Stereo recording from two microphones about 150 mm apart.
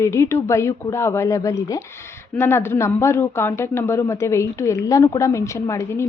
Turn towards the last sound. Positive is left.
turn(degrees=20)  # may be behind; listen again after turning